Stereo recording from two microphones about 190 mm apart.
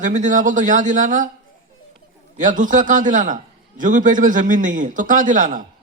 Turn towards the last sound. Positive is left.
turn(degrees=-40)  # may be behind; listen again after turning